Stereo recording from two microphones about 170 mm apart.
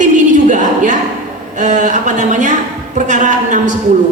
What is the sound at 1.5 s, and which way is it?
A man's voice, 45° right (ahead or behind).